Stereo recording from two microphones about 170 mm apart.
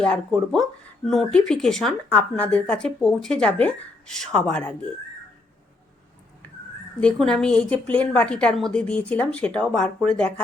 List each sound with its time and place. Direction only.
0.0 s speech: 5° left (ahead or behind)
7.0 s speech: 5° left (ahead or behind)